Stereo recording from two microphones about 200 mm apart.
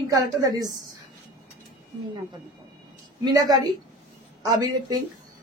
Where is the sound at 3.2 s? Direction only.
20° right (ahead or behind).